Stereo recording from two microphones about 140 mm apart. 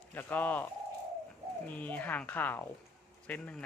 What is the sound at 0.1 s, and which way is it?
Speech, 10° left (ahead or behind).